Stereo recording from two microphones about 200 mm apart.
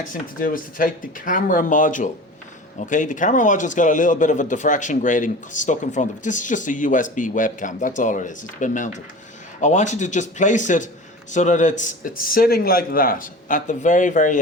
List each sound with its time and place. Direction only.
0.1 s speech: 40° left (ahead or behind)